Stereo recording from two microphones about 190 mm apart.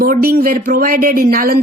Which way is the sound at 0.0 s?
50° right (ahead or behind).